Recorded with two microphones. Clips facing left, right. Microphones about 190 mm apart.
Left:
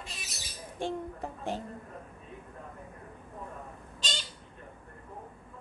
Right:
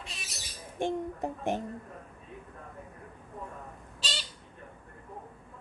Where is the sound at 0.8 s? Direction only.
15° right (ahead or behind).